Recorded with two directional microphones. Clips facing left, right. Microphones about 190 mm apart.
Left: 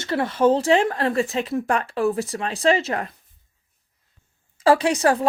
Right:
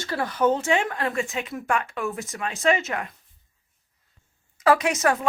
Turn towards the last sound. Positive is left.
turn(degrees=35)  # may be behind; listen again after turning